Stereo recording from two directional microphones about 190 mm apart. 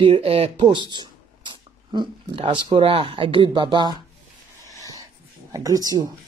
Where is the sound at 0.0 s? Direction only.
30° right (ahead or behind).